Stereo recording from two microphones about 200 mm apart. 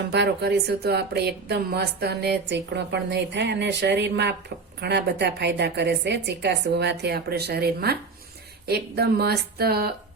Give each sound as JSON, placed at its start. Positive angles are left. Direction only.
{"t": 0.1, "sound": "a woman's voice", "side_deg": -55}